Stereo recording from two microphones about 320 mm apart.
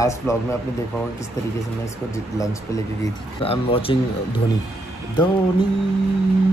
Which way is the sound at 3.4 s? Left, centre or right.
Centre.